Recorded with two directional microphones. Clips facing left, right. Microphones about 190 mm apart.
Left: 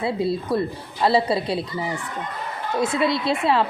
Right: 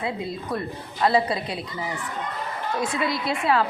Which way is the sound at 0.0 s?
35° left (ahead or behind).